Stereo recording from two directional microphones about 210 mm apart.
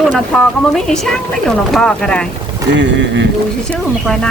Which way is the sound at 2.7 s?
60° right (ahead or behind).